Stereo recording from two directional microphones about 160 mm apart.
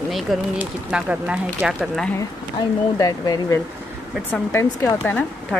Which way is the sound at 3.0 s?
25° left (ahead or behind).